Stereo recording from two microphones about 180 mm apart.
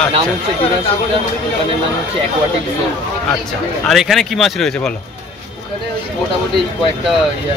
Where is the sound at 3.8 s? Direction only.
Centre (ahead or behind).